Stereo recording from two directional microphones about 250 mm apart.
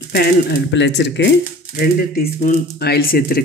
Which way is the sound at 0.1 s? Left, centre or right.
Left.